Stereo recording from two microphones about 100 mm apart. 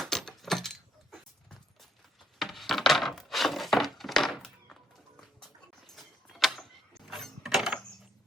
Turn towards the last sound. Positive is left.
turn(degrees=0)  # may be behind; listen again after turning